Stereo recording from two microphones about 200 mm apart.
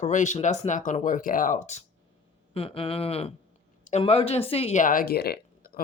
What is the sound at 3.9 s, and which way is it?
Speech, 30° left (ahead or behind).